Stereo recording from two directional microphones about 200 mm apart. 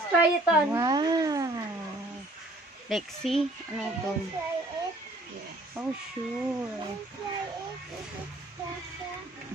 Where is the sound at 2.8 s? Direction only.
Centre (ahead or behind).